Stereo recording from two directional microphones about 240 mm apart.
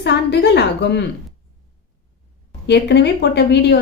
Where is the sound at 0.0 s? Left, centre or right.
Left.